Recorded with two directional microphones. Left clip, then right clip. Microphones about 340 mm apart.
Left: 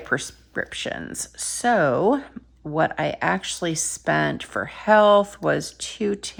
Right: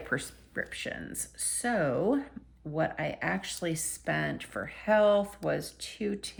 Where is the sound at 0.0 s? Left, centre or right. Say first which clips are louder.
Left 8 dB; centre.